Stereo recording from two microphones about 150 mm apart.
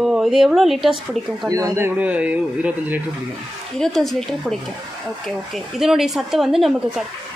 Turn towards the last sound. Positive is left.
turn(degrees=0)  # may be behind; listen again after turning